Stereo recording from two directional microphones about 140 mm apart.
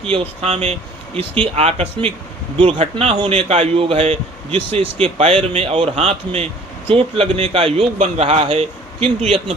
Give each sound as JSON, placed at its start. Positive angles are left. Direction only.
{"t": 0.1, "sound": "a man's voice", "side_deg": -45}
{"t": 7.9, "sound": "speech", "side_deg": -55}